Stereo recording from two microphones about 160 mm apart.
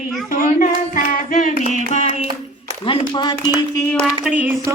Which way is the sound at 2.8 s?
30° left (ahead or behind).